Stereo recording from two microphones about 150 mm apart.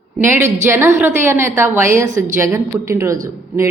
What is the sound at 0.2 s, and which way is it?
A woman's voice, 15° right (ahead or behind).